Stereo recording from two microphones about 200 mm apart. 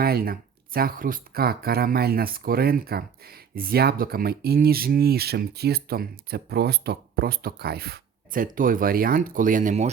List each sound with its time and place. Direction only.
0.0 s speech: 50° right (ahead or behind)